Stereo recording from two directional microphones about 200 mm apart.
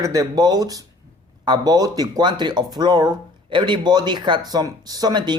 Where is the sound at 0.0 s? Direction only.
15° right (ahead or behind).